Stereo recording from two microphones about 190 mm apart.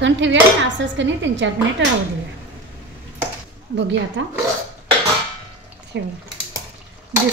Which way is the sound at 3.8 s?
70° right (ahead or behind).